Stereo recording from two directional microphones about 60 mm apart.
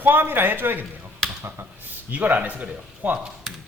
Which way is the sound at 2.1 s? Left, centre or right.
Right.